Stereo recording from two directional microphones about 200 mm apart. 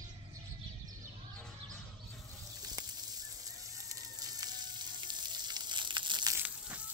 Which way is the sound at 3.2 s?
15° right (ahead or behind).